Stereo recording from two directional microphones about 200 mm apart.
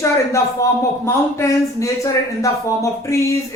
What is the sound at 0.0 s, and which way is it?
A man's voice, 15° left (ahead or behind).